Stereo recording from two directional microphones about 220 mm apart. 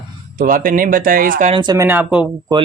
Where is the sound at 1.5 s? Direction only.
20° right (ahead or behind).